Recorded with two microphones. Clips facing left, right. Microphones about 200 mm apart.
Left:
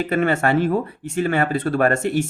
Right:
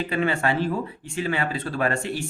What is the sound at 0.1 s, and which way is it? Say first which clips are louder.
Speech: left 6 dB; 50° left (ahead or behind).